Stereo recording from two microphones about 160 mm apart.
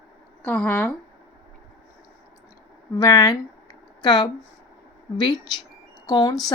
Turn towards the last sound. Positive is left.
turn(degrees=25)  # may be behind; listen again after turning